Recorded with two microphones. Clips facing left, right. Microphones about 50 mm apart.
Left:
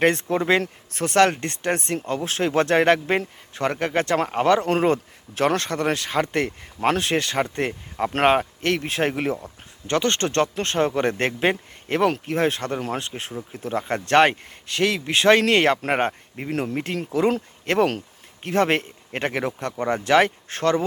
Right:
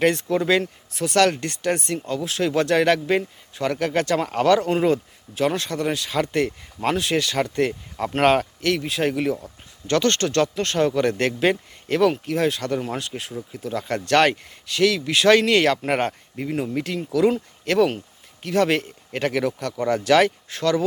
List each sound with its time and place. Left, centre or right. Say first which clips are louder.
0.0 s speech: even; left
0.6 s speech: even; left
1.1 s speech: left 1 dB; left
4.6 s speech: even; left
5.3 s speech: left 1 dB; left
8.6 s speech: even; left
9.4 s speech: left 1 dB; left
16.5 s speech: even; left
16.7 s speech: right 1 dB; left
20.5 s speech: even; left